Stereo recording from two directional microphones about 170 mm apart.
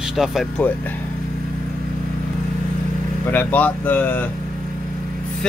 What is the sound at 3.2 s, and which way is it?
Speech, 10° left (ahead or behind).